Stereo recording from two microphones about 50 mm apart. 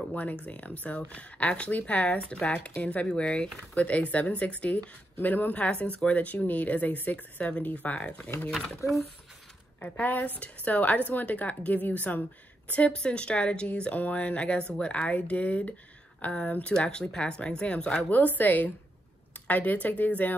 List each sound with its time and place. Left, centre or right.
0.1 s speech: left
9.8 s a woman's voice: left; by 18.0 s centre
18.1 s a woman's voice: left